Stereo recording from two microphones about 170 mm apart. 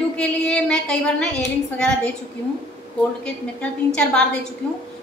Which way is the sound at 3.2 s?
5° left (ahead or behind).